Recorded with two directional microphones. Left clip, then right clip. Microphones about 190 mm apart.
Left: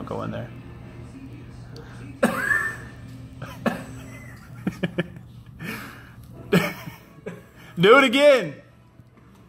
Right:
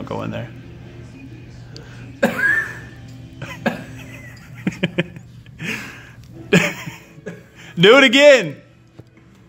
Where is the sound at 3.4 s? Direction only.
50° right (ahead or behind).